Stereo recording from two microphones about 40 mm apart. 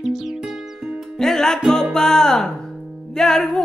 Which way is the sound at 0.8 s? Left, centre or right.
Centre.